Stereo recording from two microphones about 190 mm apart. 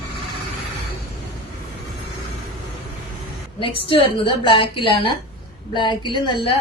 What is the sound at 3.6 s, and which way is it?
A woman's voice, 25° left (ahead or behind).